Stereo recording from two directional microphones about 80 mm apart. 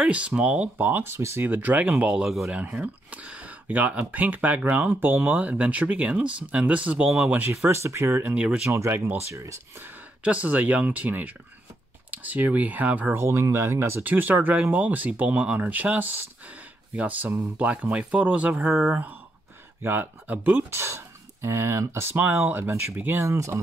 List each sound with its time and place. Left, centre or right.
0.0 s speech: centre
2.2 s speech: centre
2.5 s speech: centre
7.6 s speech: right
8.3 s speech: centre
8.6 s speech: right
9.8 s speech: centre
13.2 s speech: right
23.2 s speech: right